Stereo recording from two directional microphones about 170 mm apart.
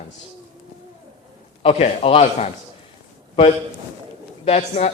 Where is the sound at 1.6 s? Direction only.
35° left (ahead or behind).